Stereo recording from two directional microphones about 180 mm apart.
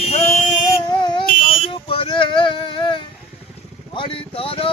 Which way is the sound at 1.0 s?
25° left (ahead or behind).